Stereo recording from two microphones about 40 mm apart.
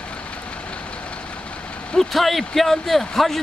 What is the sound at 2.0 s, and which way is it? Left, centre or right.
Speech, centre.